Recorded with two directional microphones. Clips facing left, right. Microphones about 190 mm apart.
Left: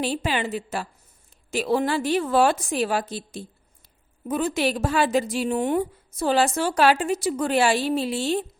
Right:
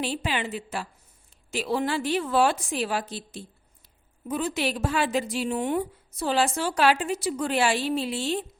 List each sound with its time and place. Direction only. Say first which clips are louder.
0.0 s a woman's voice: left 3 dB; 40° left (ahead or behind)